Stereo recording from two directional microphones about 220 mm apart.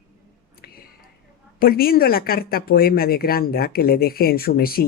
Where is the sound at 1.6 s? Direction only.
45° left (ahead or behind).